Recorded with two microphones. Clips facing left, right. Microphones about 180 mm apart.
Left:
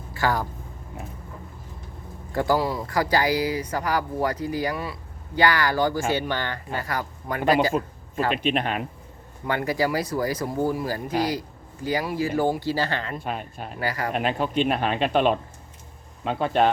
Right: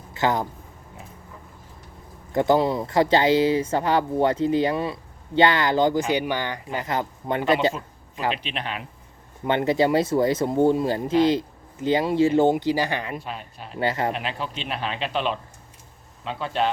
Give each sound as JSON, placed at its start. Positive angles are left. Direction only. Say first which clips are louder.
{"t": 0.1, "sound": "a sound", "louder": "right 2 dB", "side_deg": -20}
{"t": 2.3, "sound": "speech", "louder": "right 3 dB", "side_deg": -20}
{"t": 7.7, "sound": "a sound", "louder": "left 6 dB", "side_deg": 50}
{"t": 8.3, "sound": "speech", "louder": "left 5 dB", "side_deg": 50}
{"t": 9.4, "sound": "speech", "louder": "right 4 dB", "side_deg": -25}
{"t": 13.2, "sound": "speech", "louder": "left 4 dB", "side_deg": 50}
{"t": 13.7, "sound": "speech", "louder": "right 4 dB", "side_deg": -25}
{"t": 14.1, "sound": "speech", "louder": "left 4 dB", "side_deg": 50}